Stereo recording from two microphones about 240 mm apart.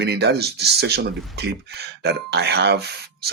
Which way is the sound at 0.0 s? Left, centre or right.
Right.